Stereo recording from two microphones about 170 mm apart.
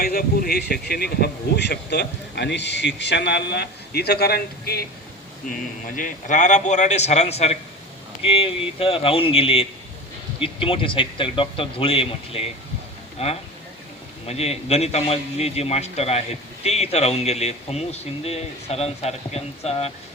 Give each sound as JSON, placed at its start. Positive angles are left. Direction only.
{"t": 0.0, "sound": "speech", "side_deg": 60}
{"t": 5.5, "sound": "a man's voice", "side_deg": 50}